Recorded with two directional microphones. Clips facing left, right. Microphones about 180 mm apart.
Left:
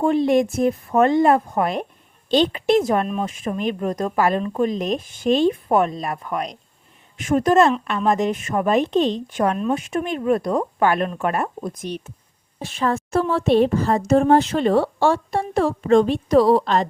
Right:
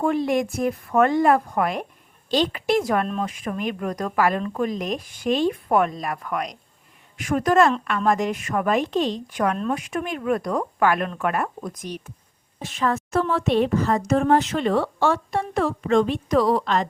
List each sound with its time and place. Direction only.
0.0 s a woman's voice: 25° left (ahead or behind)